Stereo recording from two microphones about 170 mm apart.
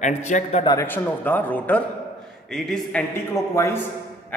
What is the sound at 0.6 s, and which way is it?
A man's voice, 15° left (ahead or behind).